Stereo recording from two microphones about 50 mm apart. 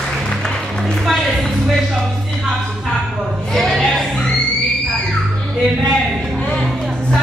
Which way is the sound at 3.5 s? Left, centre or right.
Centre.